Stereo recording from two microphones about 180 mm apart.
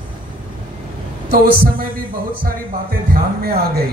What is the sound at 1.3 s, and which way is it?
Speech, 55° right (ahead or behind).